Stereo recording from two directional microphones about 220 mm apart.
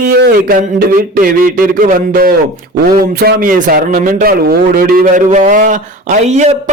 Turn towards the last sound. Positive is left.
turn(degrees=-30)  # may be behind; listen again after turning